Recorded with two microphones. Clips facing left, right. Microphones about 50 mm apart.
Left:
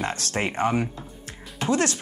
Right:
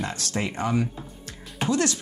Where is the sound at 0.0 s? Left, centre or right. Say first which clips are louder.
Left 2 dB; left.